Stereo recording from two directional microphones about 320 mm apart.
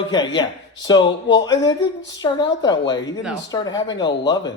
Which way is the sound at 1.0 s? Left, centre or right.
Left.